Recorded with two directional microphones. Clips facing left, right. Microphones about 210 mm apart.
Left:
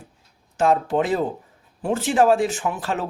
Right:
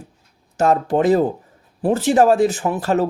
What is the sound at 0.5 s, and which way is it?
Speech, 40° right (ahead or behind).